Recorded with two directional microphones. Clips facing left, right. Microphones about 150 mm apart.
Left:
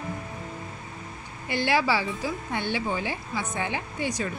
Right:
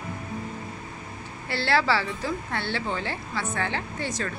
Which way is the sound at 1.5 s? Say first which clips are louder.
Even; 15° left (ahead or behind).